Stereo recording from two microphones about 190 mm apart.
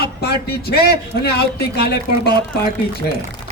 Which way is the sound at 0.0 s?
55° left (ahead or behind).